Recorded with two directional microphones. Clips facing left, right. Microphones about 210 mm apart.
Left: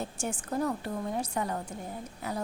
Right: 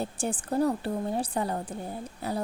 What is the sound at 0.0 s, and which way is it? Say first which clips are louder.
A woman's voice: right 4 dB; 35° right (ahead or behind).